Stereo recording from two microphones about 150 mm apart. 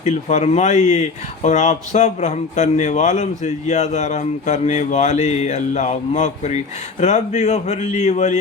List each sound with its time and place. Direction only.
0.0 s speech: 55° left (ahead or behind)